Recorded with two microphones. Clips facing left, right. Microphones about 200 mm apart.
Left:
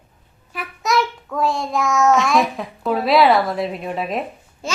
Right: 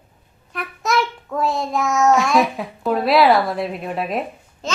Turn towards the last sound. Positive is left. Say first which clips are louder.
# right 1 dB
turn(degrees=10)  # may be behind; listen again after turning